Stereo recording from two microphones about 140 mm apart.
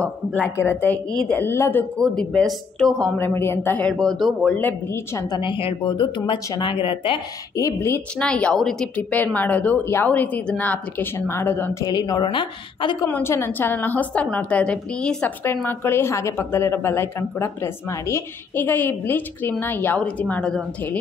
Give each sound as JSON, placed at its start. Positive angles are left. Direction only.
{"t": 0.6, "sound": "a woman's voice", "side_deg": 15}
{"t": 3.2, "sound": "a woman's voice", "side_deg": 15}
{"t": 4.2, "sound": "speech", "side_deg": 0}
{"t": 4.6, "sound": "a woman's voice", "side_deg": 15}
{"t": 5.4, "sound": "a woman's voice", "side_deg": 40}
{"t": 7.5, "sound": "a woman's voice", "side_deg": 20}
{"t": 8.2, "sound": "a woman's voice", "side_deg": 5}
{"t": 11.8, "sound": "a woman's voice", "side_deg": 30}
{"t": 13.1, "sound": "a woman's voice", "side_deg": 15}